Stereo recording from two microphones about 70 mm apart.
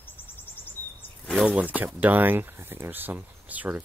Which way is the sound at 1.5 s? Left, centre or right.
Right.